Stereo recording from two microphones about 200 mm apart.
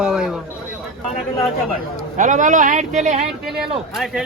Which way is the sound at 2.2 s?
40° right (ahead or behind).